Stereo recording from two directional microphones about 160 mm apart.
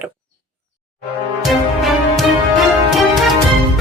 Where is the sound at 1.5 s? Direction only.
Centre (ahead or behind).